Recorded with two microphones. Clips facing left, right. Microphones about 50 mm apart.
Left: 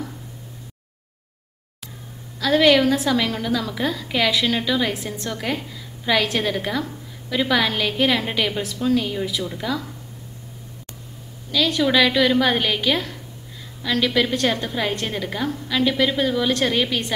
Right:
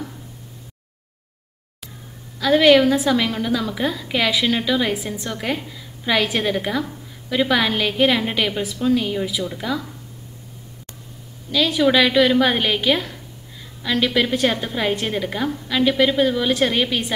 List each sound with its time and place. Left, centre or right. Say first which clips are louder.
2.4 s a woman's voice: right 2 dB; centre
11.5 s a woman's voice: right 2 dB; centre